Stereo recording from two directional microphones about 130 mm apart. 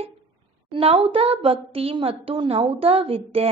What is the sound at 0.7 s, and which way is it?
A woman's voice, 45° right (ahead or behind).